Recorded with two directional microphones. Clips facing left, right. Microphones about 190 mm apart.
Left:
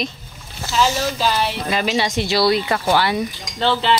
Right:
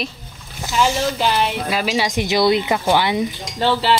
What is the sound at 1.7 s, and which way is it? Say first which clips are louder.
Speech: even; 5° right (ahead or behind).